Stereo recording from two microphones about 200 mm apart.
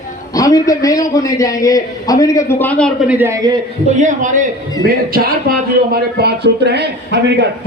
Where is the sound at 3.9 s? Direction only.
40° right (ahead or behind).